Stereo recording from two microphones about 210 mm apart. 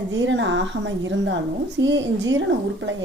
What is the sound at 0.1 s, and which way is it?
Speech, 60° right (ahead or behind).